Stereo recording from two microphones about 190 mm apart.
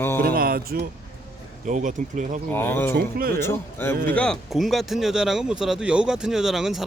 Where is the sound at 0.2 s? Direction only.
50° right (ahead or behind).